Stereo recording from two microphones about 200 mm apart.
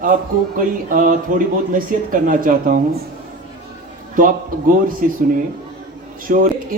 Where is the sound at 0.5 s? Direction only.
40° right (ahead or behind).